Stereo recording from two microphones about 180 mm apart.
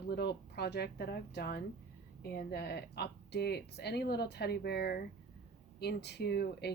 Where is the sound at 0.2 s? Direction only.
65° left (ahead or behind).